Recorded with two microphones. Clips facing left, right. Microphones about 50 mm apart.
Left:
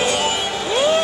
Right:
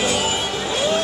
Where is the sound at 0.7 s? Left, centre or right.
Centre.